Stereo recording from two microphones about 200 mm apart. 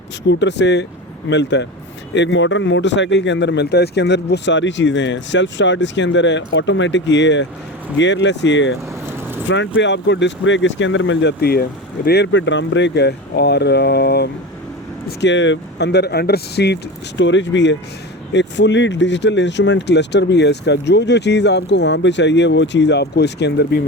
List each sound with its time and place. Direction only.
0.3 s speech: 60° left (ahead or behind)
9.0 s vehicle: 10° right (ahead or behind)
9.5 s speech: 65° left (ahead or behind)
17.2 s speech: 65° left (ahead or behind)